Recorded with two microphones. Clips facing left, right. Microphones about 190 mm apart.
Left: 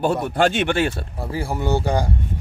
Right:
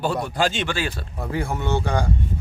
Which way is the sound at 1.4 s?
35° left (ahead or behind).